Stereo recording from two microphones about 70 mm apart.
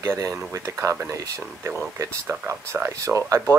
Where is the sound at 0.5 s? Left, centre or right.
Right.